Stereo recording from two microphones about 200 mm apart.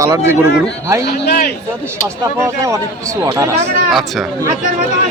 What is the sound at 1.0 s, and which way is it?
Speech, 50° left (ahead or behind).